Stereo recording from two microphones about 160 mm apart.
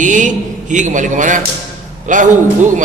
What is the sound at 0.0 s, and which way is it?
A man's voice, 50° right (ahead or behind).